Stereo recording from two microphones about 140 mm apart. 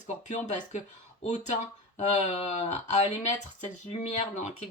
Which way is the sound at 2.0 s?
55° left (ahead or behind).